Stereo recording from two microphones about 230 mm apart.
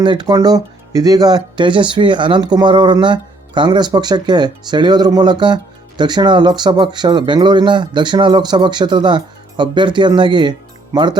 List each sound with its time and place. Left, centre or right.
0.0 s speech: centre